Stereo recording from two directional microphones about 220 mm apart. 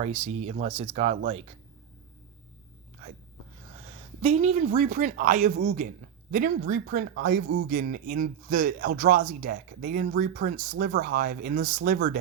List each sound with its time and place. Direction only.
0.0 s speech: 30° right (ahead or behind)
3.8 s a man's voice: 30° right (ahead or behind)